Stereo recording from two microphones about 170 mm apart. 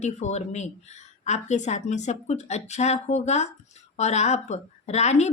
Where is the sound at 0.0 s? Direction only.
45° left (ahead or behind).